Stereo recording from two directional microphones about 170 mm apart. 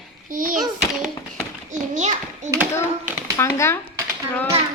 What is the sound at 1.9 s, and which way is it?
Speech, 45° right (ahead or behind).